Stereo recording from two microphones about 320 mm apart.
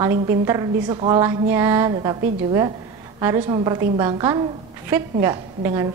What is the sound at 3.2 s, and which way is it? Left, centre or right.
A woman's voice, centre.